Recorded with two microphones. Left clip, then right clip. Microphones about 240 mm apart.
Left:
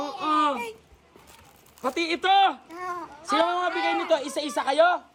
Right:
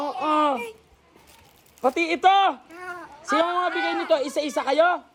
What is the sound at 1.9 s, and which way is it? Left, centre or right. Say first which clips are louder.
Speech: right 4 dB; centre.